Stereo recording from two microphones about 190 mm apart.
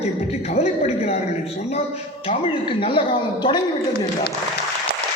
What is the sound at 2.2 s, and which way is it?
Speech, 30° left (ahead or behind).